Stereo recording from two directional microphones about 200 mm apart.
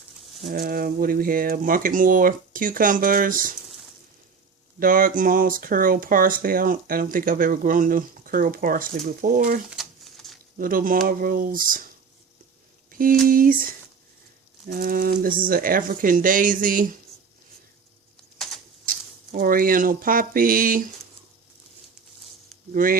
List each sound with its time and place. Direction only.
0.5 s speech: 45° right (ahead or behind)
4.8 s speech: 45° right (ahead or behind)
9.6 s a sound: centre (ahead or behind)
10.6 s speech: 45° right (ahead or behind)
12.9 s speech: 45° right (ahead or behind)
18.9 s speech: 45° right (ahead or behind)
22.7 s speech: 45° right (ahead or behind)